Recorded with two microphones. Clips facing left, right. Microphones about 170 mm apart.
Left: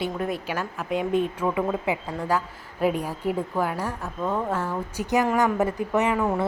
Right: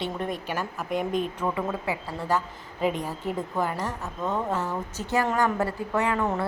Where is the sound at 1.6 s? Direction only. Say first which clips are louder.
Left 4 dB; 20° left (ahead or behind).